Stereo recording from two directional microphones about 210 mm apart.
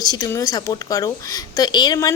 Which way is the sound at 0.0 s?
20° left (ahead or behind).